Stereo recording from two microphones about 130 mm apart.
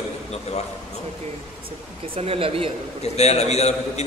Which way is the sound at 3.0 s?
55° left (ahead or behind).